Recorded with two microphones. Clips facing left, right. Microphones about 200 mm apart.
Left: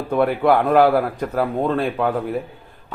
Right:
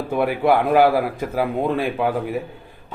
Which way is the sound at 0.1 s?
5° right (ahead or behind).